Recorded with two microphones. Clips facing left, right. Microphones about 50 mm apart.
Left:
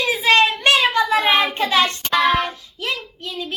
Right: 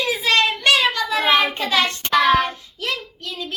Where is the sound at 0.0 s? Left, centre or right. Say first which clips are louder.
Left 3 dB; left.